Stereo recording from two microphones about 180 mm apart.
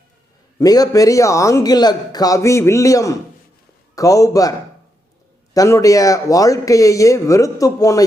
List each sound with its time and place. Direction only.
0.6 s a man's voice: 20° left (ahead or behind)
5.5 s speech: 20° left (ahead or behind)